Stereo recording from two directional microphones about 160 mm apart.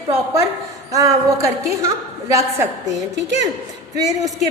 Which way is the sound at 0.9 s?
20° right (ahead or behind).